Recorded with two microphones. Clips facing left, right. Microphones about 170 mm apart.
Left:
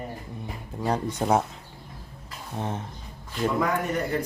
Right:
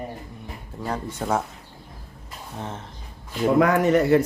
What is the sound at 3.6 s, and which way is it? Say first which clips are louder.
Speech: right 8 dB; 90° right.